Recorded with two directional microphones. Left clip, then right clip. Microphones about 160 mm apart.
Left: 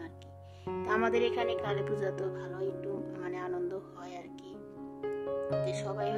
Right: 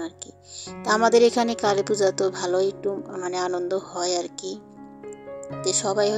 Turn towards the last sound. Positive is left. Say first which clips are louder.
# right 11 dB
turn(degrees=-35)  # may be behind; listen again after turning